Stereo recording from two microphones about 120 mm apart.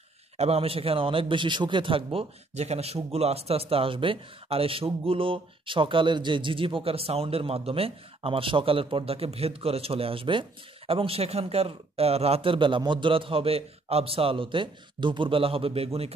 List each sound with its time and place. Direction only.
0.4 s a man's voice: 55° right (ahead or behind)